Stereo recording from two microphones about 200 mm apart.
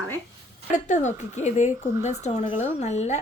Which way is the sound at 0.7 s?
35° left (ahead or behind).